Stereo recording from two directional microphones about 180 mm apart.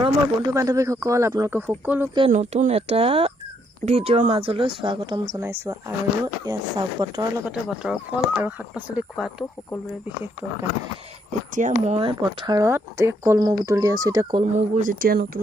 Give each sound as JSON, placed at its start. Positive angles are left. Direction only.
{"t": 0.0, "sound": "speech", "side_deg": -20}
{"t": 2.3, "sound": "speech", "side_deg": -40}
{"t": 5.3, "sound": "speech", "side_deg": -15}
{"t": 7.4, "sound": "speech", "side_deg": -5}
{"t": 11.5, "sound": "speech", "side_deg": -40}
{"t": 14.4, "sound": "speech", "side_deg": -45}